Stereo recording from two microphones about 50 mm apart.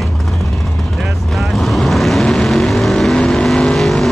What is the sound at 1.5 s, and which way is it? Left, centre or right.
Vehicle, centre.